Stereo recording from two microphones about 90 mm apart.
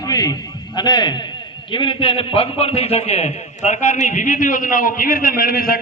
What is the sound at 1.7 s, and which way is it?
A man's voice, 65° left (ahead or behind).